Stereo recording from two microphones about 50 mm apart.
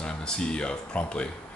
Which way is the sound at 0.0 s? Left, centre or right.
Centre.